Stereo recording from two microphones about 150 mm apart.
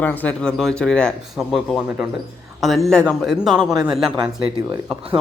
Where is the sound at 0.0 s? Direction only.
10° left (ahead or behind); by 3.7 s 5° right (ahead or behind).